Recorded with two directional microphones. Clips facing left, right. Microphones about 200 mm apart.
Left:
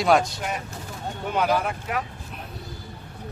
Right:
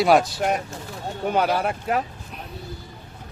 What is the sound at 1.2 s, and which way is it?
Speech, 35° right (ahead or behind).